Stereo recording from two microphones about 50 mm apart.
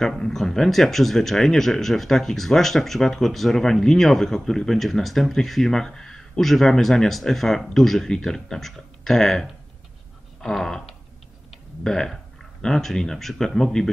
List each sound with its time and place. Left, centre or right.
0.0 s speech: centre
10.4 s a sound: centre
11.8 s speech: centre